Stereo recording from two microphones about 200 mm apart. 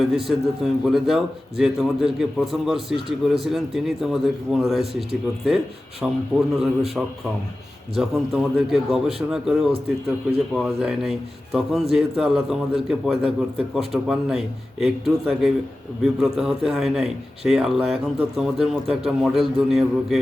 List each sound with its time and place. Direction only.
0.3 s a man's voice: centre (ahead or behind)